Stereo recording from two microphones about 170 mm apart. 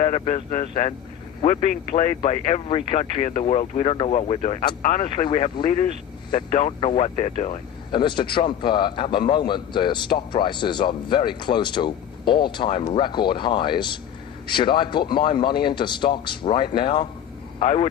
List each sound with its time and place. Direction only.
0.0 s speech: 35° left (ahead or behind)
7.9 s speech: 25° left (ahead or behind)